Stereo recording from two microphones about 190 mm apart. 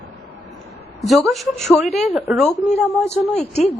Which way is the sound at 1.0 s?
Centre (ahead or behind).